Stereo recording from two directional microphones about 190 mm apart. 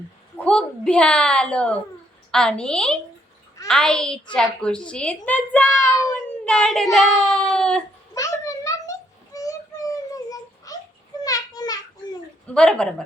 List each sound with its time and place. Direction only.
0.3 s a woman's voice: 5° left (ahead or behind)
5.6 s child singing: 20° left (ahead or behind)
6.1 s cat: 5° left (ahead or behind)
7.4 s a woman's voice: 5° left (ahead or behind)
8.1 s a sound: 15° left (ahead or behind)
11.2 s children playing: 20° left (ahead or behind)
12.5 s a woman's voice: 5° left (ahead or behind)